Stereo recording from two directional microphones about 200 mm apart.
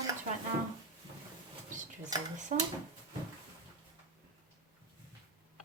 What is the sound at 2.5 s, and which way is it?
Speech, 35° right (ahead or behind).